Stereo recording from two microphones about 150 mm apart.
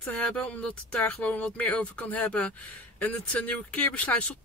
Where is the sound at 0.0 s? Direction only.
10° left (ahead or behind).